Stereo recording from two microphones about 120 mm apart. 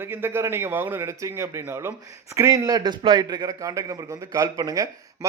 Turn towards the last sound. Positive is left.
turn(degrees=-30)  # may be behind; listen again after turning